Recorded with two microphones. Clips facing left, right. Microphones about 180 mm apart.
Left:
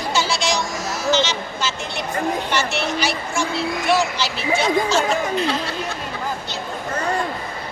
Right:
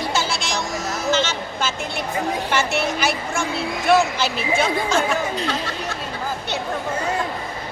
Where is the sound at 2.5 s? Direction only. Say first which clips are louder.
Right 1 dB; 55° right (ahead or behind).